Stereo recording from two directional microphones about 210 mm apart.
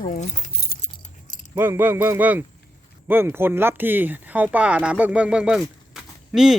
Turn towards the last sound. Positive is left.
turn(degrees=0)  # may be behind; listen again after turning